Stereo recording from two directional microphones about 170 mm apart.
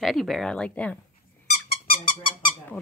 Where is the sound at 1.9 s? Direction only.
30° left (ahead or behind).